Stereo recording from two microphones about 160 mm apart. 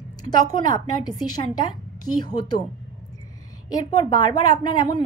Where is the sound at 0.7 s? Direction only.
25° left (ahead or behind).